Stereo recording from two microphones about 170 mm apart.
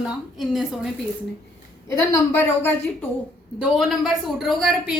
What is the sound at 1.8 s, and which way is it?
Speech, 15° left (ahead or behind).